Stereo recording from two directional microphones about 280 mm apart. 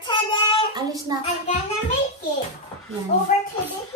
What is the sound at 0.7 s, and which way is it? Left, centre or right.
Speech, centre.